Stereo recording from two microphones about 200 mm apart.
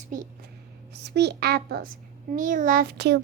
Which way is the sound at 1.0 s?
55° right (ahead or behind).